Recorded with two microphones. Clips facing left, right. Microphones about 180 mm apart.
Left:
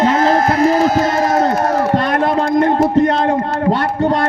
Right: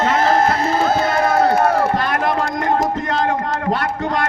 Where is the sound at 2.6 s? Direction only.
30° left (ahead or behind).